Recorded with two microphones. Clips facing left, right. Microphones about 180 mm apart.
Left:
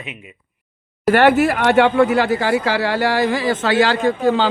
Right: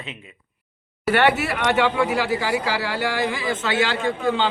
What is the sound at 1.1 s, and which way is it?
Speech, 50° left (ahead or behind).